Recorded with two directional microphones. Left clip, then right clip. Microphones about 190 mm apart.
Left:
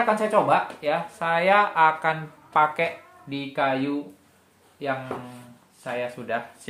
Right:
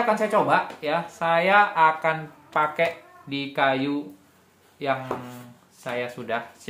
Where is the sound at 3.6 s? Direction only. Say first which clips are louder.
Right 2 dB; 15° right (ahead or behind).